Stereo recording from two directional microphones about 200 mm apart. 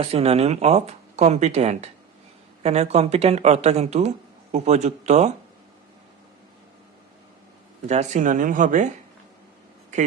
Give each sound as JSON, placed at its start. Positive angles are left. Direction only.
{"t": 0.0, "sound": "speech", "side_deg": -30}
{"t": 7.9, "sound": "speech", "side_deg": -35}